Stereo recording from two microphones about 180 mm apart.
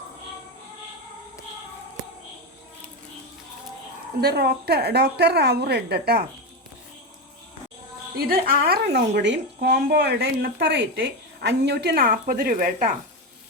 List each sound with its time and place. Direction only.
4.2 s a woman's voice: 60° right (ahead or behind)
8.3 s a woman's voice: 60° right (ahead or behind); by 11.0 s 85° right
11.4 s a woman's voice: 70° right (ahead or behind); by 12.9 s 50° right (ahead or behind)